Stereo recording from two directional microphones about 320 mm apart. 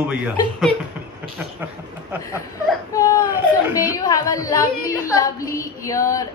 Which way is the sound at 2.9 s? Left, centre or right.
Centre.